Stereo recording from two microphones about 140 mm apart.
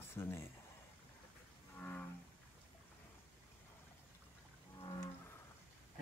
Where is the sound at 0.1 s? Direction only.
15° left (ahead or behind).